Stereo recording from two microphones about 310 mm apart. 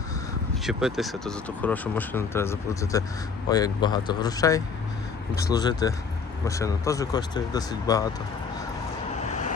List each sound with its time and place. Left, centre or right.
0.6 s speech: centre
9.2 s vehicle: left